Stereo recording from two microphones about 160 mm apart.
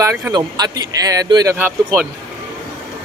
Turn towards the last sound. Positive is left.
turn(degrees=-15)  # may be behind; listen again after turning